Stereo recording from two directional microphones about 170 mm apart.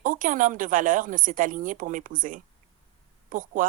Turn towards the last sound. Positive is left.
turn(degrees=-50)  # may be behind; listen again after turning